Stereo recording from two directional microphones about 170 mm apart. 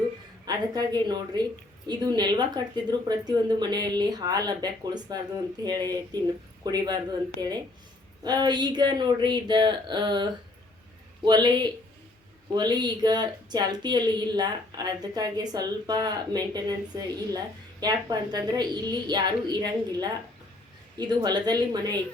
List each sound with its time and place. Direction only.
0.4 s speech: 25° right (ahead or behind)
11.3 s speech: 25° right (ahead or behind)